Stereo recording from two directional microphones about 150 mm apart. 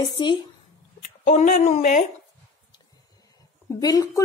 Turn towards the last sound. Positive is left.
turn(degrees=25)  # may be behind; listen again after turning